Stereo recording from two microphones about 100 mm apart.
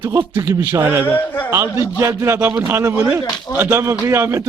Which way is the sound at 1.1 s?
20° left (ahead or behind).